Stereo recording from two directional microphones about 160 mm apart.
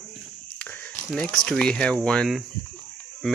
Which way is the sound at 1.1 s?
5° left (ahead or behind).